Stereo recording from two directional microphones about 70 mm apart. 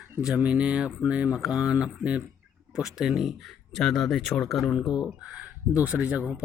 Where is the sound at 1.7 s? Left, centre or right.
Centre.